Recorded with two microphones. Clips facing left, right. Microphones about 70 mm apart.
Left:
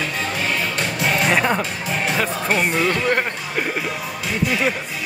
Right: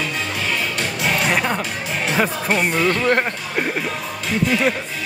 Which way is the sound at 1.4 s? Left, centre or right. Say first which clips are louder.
Left 2 dB; left.